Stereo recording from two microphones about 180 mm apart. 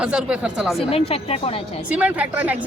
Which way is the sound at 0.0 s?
5° right (ahead or behind).